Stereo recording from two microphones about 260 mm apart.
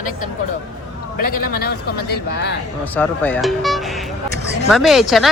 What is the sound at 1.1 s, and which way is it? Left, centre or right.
A man's voice, left.